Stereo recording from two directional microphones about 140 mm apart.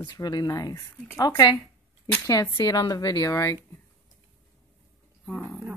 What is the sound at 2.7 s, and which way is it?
Speech, 30° left (ahead or behind).